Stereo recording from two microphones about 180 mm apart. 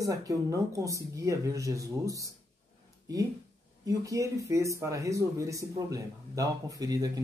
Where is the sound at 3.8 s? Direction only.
20° right (ahead or behind).